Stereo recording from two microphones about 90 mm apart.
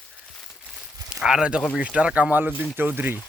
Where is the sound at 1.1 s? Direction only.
10° right (ahead or behind).